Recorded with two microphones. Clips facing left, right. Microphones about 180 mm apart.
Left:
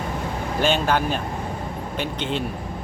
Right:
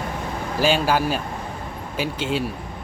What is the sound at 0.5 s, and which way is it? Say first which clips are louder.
Speech: right 1 dB; 5° right (ahead or behind).